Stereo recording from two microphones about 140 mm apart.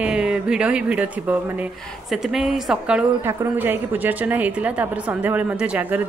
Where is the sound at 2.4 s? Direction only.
5° right (ahead or behind).